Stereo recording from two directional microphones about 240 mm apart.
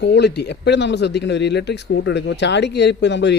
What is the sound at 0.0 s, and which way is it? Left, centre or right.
Speech, left.